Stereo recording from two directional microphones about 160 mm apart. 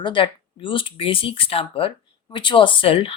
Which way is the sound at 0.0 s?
30° left (ahead or behind).